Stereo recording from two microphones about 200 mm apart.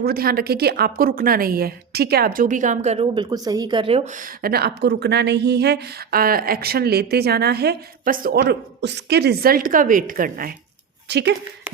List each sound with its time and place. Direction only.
0.0 s speech: 50° right (ahead or behind); by 4.1 s 30° right (ahead or behind)
4.4 s speech: 50° right (ahead or behind)
11.1 s speech: 55° right (ahead or behind)